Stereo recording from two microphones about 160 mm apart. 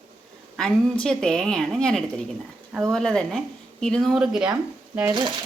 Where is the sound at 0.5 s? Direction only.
5° left (ahead or behind).